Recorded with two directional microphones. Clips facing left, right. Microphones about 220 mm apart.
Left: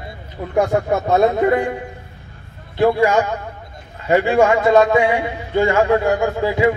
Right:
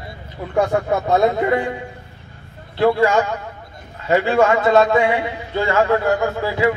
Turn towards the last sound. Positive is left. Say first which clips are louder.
# left 2 dB
turn(degrees=15)  # may be behind; listen again after turning